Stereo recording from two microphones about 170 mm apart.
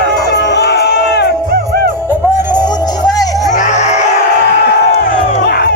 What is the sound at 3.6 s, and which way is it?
Music, 45° left (ahead or behind).